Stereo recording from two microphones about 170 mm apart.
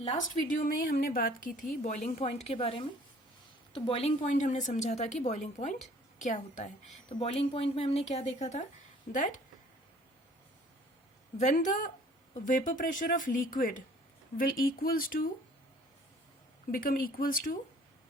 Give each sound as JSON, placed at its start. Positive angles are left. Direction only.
{"t": 0.0, "sound": "a woman's voice", "side_deg": 45}
{"t": 7.1, "sound": "speech", "side_deg": 35}
{"t": 11.3, "sound": "speech", "side_deg": 45}
{"t": 16.7, "sound": "speech", "side_deg": 60}